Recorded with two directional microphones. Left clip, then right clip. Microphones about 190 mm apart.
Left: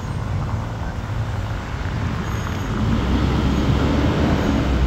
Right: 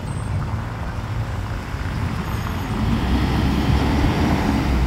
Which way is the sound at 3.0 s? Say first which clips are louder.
Even; 40° right (ahead or behind).